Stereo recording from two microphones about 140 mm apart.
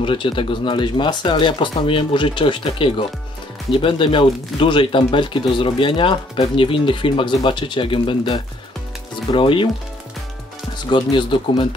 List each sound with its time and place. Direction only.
0.0 s speech: 35° left (ahead or behind)
10.9 s speech: 35° left (ahead or behind)